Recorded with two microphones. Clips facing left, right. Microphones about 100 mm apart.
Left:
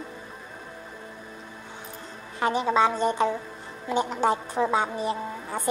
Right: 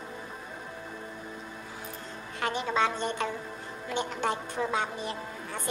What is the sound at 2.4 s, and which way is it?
A woman's voice, 30° left (ahead or behind).